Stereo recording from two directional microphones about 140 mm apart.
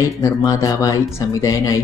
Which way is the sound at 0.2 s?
20° left (ahead or behind).